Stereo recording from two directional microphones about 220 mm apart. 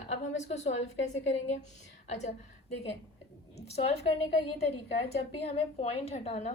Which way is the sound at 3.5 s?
30° left (ahead or behind).